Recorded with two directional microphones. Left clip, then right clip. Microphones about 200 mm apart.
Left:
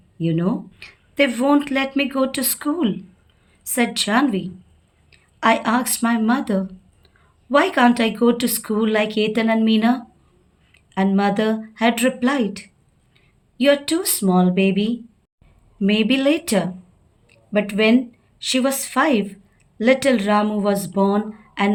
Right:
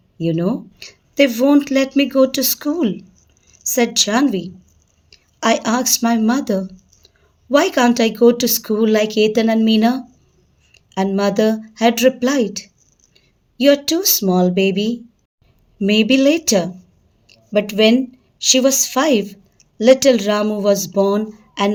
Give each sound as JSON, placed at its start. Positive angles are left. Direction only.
{"t": 0.2, "sound": "speech", "side_deg": -45}